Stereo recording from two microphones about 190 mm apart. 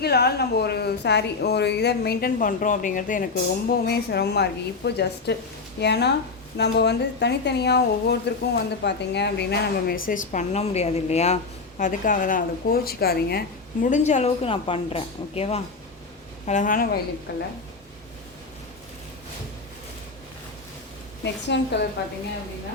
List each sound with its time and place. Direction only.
0.0 s speech: 55° left (ahead or behind)
3.7 s a woman's voice: 55° left (ahead or behind)
13.8 s a woman's voice: 40° left (ahead or behind)
16.5 s a woman's voice: 45° left (ahead or behind)
17.3 s speech: 65° left (ahead or behind)
21.4 s speech: 65° left (ahead or behind)